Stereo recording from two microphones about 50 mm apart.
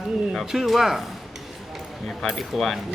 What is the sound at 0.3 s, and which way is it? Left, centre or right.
Speech, centre.